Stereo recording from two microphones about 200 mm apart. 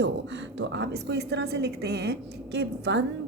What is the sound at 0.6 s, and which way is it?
A woman's voice, 60° right (ahead or behind).